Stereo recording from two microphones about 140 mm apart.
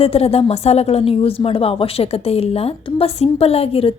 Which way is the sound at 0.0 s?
45° left (ahead or behind).